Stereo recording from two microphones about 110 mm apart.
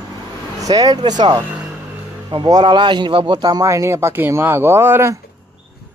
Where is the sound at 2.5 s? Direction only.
40° right (ahead or behind).